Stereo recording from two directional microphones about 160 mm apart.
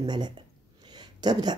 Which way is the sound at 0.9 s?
25° right (ahead or behind).